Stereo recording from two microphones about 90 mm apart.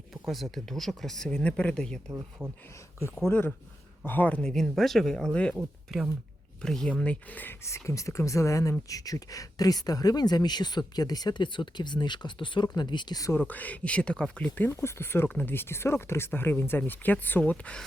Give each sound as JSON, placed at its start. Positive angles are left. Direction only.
{"t": 0.1, "sound": "speech", "side_deg": 0}
{"t": 2.4, "sound": "speech", "side_deg": -20}
{"t": 3.2, "sound": "speech", "side_deg": 25}
{"t": 5.5, "sound": "speech", "side_deg": -5}
{"t": 6.6, "sound": "speech", "side_deg": 10}
{"t": 7.6, "sound": "speech", "side_deg": 35}
{"t": 13.5, "sound": "speech", "side_deg": 15}
{"t": 14.7, "sound": "speech", "side_deg": 30}